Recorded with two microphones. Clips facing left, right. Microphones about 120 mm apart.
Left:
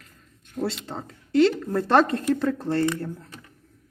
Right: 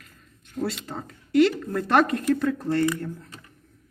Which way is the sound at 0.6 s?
25° left (ahead or behind).